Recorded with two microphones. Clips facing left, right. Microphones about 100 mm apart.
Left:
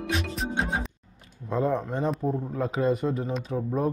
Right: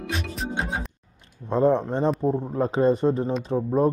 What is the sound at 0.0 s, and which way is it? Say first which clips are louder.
Music: left 1 dB; centre (ahead or behind).